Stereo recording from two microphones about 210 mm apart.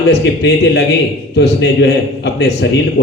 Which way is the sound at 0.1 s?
55° left (ahead or behind).